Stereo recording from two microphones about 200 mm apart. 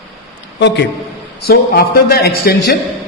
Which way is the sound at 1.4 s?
55° left (ahead or behind).